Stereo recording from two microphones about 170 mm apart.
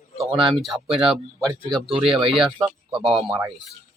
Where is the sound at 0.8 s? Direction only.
35° right (ahead or behind).